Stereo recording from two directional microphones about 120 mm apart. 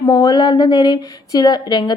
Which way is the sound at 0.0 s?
35° left (ahead or behind).